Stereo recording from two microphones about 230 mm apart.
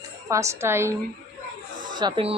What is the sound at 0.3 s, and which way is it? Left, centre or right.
Speech, centre.